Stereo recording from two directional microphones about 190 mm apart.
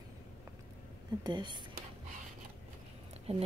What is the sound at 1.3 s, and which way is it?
Speech, 25° right (ahead or behind).